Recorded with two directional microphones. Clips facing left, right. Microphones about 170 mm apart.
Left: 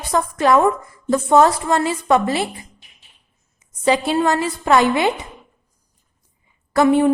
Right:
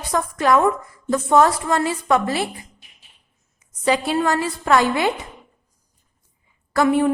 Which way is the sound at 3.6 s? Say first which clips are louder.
Left 2 dB; 25° left (ahead or behind).